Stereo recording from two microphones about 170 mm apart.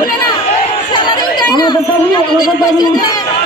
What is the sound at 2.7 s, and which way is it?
Speech, 25° left (ahead or behind).